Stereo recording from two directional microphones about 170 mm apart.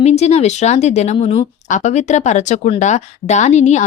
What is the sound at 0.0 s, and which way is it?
A woman's voice, 40° left (ahead or behind).